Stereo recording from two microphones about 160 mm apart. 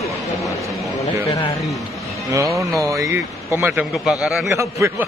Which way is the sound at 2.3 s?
20° right (ahead or behind).